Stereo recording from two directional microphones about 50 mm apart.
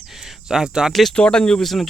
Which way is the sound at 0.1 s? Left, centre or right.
Centre.